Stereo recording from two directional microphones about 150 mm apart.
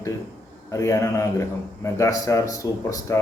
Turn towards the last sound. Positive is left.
turn(degrees=20)  # may be behind; listen again after turning